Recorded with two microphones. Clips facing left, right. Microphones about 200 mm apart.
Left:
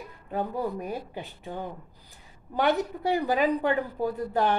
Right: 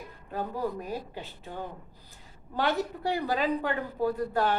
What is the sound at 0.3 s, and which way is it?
A woman's voice, 15° left (ahead or behind).